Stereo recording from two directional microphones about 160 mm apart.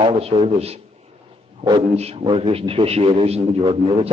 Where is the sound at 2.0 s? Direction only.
40° right (ahead or behind).